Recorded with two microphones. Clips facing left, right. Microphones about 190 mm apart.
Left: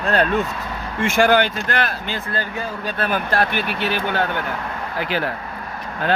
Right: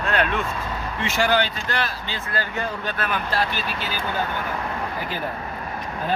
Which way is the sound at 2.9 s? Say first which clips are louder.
Left 7 dB; 35° left (ahead or behind).